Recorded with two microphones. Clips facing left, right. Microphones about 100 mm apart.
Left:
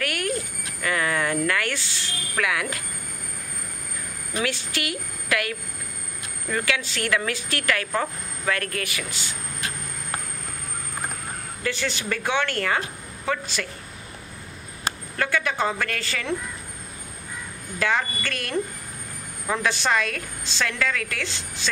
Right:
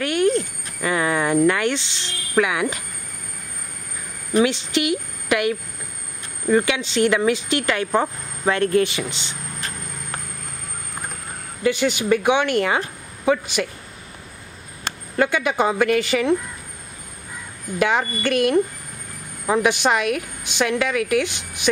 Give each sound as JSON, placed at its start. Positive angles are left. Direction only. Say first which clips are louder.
{"t": 0.0, "sound": "a sound", "louder": "right 9 dB", "side_deg": -25}
{"t": 0.8, "sound": "speech", "louder": "right 4 dB", "side_deg": -20}
{"t": 4.4, "sound": "speech", "louder": "right 9 dB", "side_deg": -20}
{"t": 11.6, "sound": "a woman's voice", "louder": "right 8 dB", "side_deg": -15}
{"t": 15.1, "sound": "a woman's voice", "louder": "right 6 dB", "side_deg": -20}
{"t": 17.7, "sound": "a woman's voice", "louder": "right 4 dB", "side_deg": -20}